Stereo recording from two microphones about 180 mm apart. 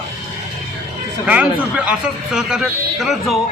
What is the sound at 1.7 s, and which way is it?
A man's voice, 5° right (ahead or behind).